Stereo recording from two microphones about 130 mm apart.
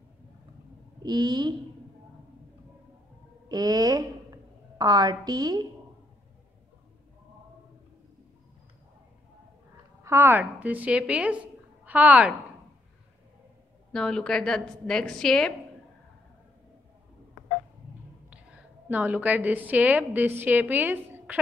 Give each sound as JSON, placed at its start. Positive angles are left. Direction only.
{"t": 1.0, "sound": "a woman's voice", "side_deg": -35}
{"t": 3.4, "sound": "a woman's voice", "side_deg": -30}
{"t": 10.0, "sound": "a woman's voice", "side_deg": -20}
{"t": 13.9, "sound": "a woman's voice", "side_deg": 5}
{"t": 18.9, "sound": "a woman's voice", "side_deg": -10}